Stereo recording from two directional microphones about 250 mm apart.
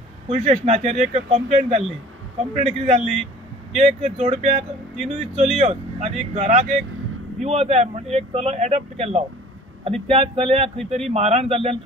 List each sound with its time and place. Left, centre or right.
0.3 s speech: right